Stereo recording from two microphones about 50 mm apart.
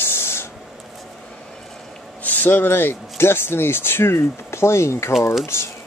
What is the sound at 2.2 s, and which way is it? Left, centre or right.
Speech, left.